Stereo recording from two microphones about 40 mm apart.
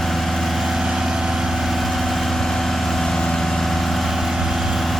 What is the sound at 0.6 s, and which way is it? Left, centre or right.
Vehicle, centre.